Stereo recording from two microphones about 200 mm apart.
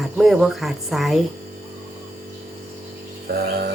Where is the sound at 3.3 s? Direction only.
55° right (ahead or behind).